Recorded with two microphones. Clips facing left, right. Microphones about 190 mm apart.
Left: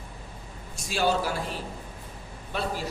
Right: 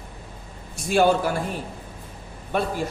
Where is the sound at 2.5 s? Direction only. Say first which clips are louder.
Right 6 dB; 50° right (ahead or behind).